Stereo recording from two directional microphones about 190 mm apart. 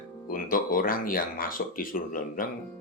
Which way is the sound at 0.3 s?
45° left (ahead or behind).